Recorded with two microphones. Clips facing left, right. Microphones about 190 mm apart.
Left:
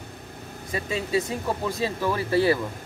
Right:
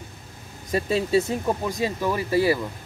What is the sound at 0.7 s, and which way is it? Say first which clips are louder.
Speech: right 5 dB; 35° right (ahead or behind).